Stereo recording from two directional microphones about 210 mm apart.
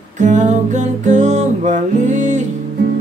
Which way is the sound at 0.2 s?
35° right (ahead or behind).